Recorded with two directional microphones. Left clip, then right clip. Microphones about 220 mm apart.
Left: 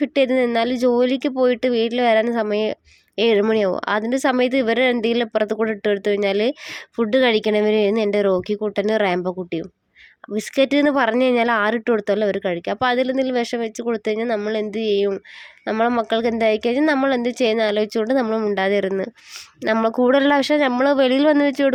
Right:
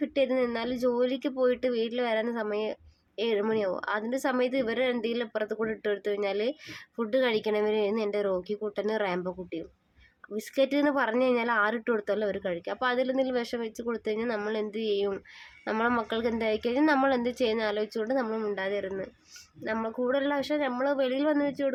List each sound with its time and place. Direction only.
0.0 s a woman's voice: 35° left (ahead or behind)